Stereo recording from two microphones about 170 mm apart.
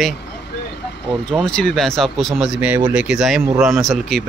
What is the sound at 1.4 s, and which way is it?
Speech, 5° left (ahead or behind).